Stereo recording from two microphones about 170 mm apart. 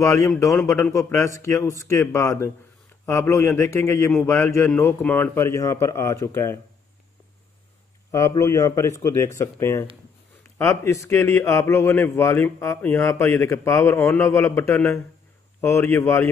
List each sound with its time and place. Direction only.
0.0 s a man's voice: 20° left (ahead or behind)
8.1 s a man's voice: 20° left (ahead or behind)